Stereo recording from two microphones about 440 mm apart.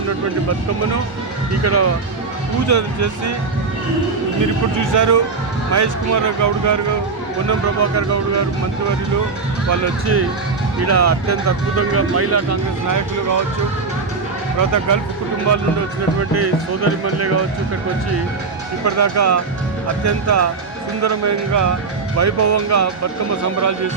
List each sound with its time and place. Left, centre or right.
1.6 s speech: right
4.8 s speech: right
7.8 s speech: right
9.8 s speech: right
14.6 s speech: right
17.2 s speech: right
18.9 s speech: right